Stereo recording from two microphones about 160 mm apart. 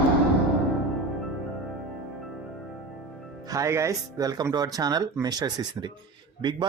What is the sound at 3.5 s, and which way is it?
A man's voice, 20° right (ahead or behind).